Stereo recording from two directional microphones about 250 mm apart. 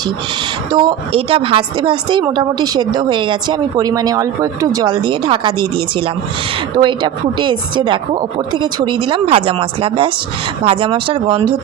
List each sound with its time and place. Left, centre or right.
0.7 s a woman's voice: centre